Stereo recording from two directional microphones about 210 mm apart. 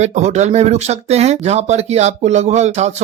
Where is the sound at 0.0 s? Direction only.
35° right (ahead or behind).